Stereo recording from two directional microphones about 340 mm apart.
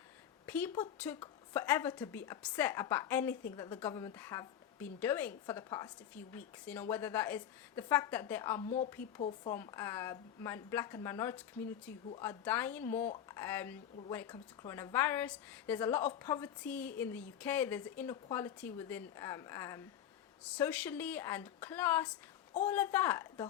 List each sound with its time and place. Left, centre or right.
0.4 s a woman's voice: centre
8.6 s a woman's voice: centre